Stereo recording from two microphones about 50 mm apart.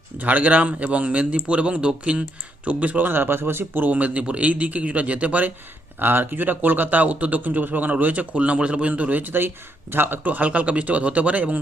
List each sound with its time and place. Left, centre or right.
0.2 s speech: right
3.1 s speech: right
3.8 s speech: right
6.0 s speech: right
10.2 s speech: right